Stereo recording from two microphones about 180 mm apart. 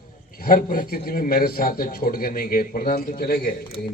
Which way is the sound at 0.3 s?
55° left (ahead or behind).